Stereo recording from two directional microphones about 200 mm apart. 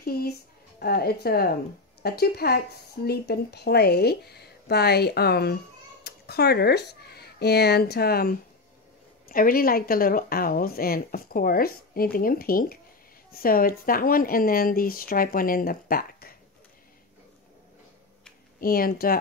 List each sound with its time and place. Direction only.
0.0 s a sound: 50° left (ahead or behind)
0.7 s speech: 50° left (ahead or behind)
18.6 s speech: 45° left (ahead or behind)